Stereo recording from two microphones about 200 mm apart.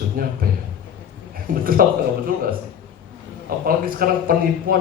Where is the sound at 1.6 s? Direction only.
45° right (ahead or behind).